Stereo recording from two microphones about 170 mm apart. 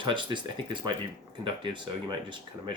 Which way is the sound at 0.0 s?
30° right (ahead or behind).